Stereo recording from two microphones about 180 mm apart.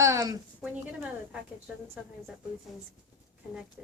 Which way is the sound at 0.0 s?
20° right (ahead or behind).